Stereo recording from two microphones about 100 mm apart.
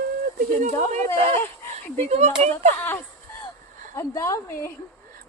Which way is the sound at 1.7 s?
90° right.